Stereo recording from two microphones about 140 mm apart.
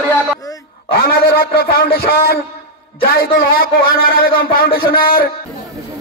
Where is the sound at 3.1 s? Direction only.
90° left.